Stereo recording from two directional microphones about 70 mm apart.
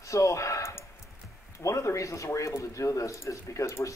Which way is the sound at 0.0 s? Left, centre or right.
Left.